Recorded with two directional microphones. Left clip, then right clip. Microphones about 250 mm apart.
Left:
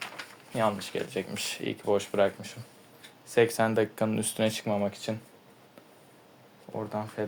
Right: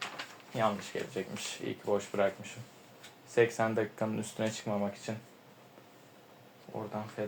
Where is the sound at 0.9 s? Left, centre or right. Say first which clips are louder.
Left 5 dB; left.